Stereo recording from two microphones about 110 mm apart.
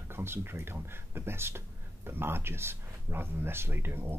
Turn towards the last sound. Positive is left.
turn(degrees=-20)  # may be behind; listen again after turning